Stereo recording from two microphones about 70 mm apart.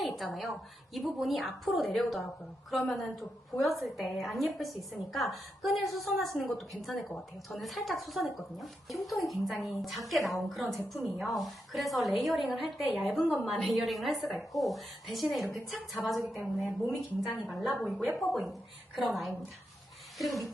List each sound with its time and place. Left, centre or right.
0.9 s speech: centre